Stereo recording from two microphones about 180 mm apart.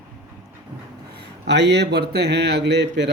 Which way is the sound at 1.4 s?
70° right (ahead or behind).